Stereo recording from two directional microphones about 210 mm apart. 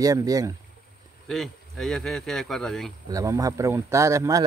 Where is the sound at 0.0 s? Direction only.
15° right (ahead or behind).